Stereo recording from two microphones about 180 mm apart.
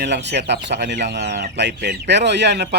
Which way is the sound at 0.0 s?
70° right (ahead or behind).